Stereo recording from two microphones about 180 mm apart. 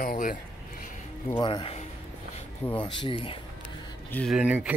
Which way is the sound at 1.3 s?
25° left (ahead or behind).